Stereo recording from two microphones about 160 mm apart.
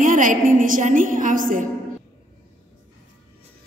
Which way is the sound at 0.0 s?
55° right (ahead or behind).